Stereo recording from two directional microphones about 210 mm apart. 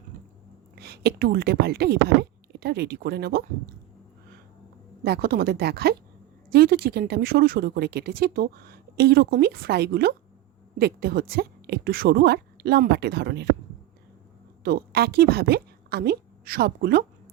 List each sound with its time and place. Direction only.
0.8 s speech: 50° right (ahead or behind)
5.0 s speech: 50° right (ahead or behind)
14.6 s a woman's voice: 45° right (ahead or behind)